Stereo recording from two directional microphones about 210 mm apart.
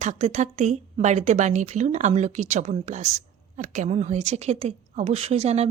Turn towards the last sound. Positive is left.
turn(degrees=-30)  # may be behind; listen again after turning